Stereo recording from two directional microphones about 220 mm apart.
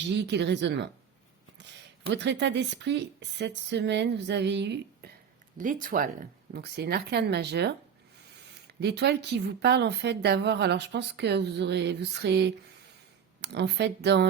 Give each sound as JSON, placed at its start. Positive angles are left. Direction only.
{"t": 0.1, "sound": "a woman's voice", "side_deg": -50}
{"t": 2.0, "sound": "a woman's voice", "side_deg": -50}
{"t": 5.5, "sound": "a woman's voice", "side_deg": -35}
{"t": 8.8, "sound": "a woman's voice", "side_deg": -50}